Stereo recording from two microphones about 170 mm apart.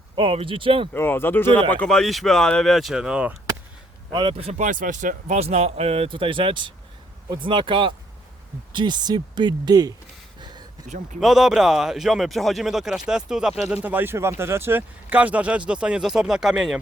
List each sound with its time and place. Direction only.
0.2 s speech: 35° right (ahead or behind)
0.9 s speech: 15° left (ahead or behind); by 3.3 s 5° right (ahead or behind)
4.1 s speech: 30° right (ahead or behind)
10.8 s speech: 50° right (ahead or behind)
11.2 s speech: centre (ahead or behind)